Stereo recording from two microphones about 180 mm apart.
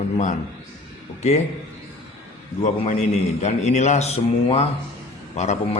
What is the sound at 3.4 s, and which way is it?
Speech, 40° left (ahead or behind).